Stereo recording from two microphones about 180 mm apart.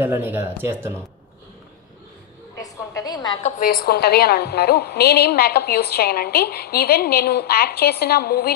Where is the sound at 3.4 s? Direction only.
50° left (ahead or behind).